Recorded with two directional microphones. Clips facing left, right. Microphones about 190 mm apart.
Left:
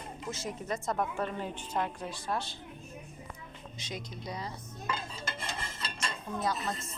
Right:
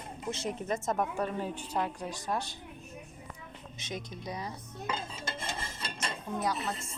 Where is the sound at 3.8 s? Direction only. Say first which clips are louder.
Right 2 dB; 20° right (ahead or behind).